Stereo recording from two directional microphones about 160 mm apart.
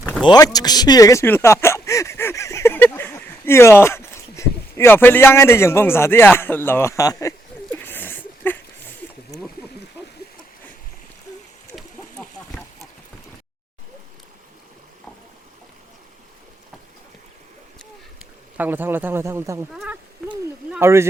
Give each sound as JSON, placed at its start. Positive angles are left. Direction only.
{"t": 0.3, "sound": "speech", "side_deg": 25}
{"t": 11.7, "sound": "a sound", "side_deg": 5}
{"t": 18.5, "sound": "a man's voice", "side_deg": -10}